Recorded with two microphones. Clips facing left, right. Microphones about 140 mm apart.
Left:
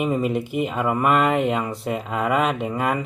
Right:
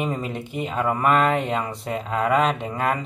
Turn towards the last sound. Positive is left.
turn(degrees=5)  # may be behind; listen again after turning